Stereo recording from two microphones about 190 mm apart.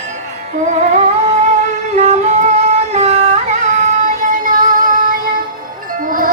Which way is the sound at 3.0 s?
35° right (ahead or behind).